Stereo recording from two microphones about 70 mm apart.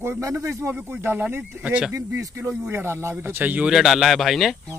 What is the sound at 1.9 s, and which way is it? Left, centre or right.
Speech, right.